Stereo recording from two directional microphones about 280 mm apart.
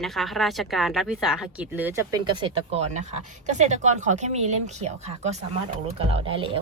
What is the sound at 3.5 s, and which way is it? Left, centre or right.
Speech, right.